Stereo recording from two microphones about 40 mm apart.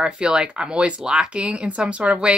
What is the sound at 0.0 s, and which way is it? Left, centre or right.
Speech, right.